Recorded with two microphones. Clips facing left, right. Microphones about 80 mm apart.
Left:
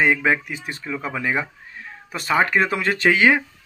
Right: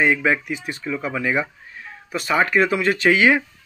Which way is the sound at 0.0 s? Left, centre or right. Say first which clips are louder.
Even; left.